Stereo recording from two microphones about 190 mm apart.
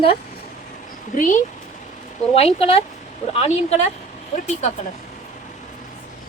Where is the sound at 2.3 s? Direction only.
30° left (ahead or behind).